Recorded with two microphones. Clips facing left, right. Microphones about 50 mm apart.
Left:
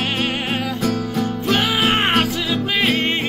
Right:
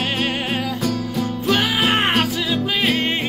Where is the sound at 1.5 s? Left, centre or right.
Centre.